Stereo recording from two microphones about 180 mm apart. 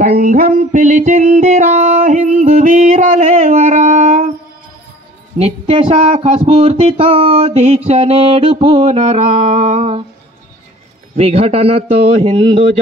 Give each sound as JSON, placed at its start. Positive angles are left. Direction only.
{"t": 0.0, "sound": "music", "side_deg": -45}
{"t": 5.4, "sound": "music", "side_deg": -30}
{"t": 11.1, "sound": "music", "side_deg": -35}